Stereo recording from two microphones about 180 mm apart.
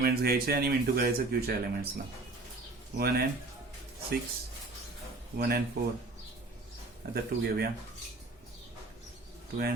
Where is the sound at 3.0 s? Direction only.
60° right (ahead or behind).